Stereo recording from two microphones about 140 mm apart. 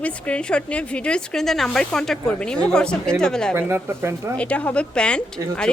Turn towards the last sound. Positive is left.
turn(degrees=5)  # may be behind; listen again after turning